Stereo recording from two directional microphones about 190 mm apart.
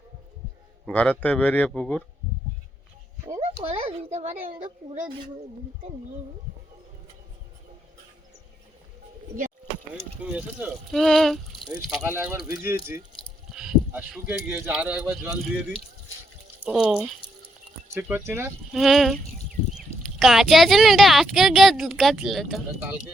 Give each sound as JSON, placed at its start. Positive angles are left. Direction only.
{"t": 0.9, "sound": "speech", "side_deg": 5}
{"t": 3.4, "sound": "speech", "side_deg": -30}
{"t": 10.3, "sound": "a woman's voice", "side_deg": -5}
{"t": 11.9, "sound": "speech", "side_deg": -10}
{"t": 16.6, "sound": "a woman's voice", "side_deg": -5}
{"t": 18.7, "sound": "a woman's voice", "side_deg": 0}